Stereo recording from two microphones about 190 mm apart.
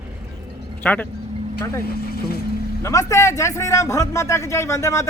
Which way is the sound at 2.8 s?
15° left (ahead or behind).